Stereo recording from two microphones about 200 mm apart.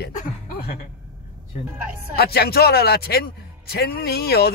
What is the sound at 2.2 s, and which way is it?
A man's voice, 50° left (ahead or behind).